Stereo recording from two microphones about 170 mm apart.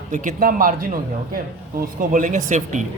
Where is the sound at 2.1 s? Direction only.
50° right (ahead or behind).